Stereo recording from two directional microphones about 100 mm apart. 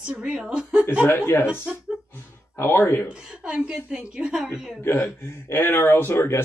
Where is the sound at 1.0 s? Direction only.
25° left (ahead or behind).